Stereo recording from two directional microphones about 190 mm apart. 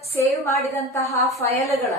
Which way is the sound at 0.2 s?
15° left (ahead or behind).